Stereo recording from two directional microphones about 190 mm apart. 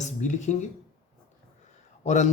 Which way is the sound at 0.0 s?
40° left (ahead or behind).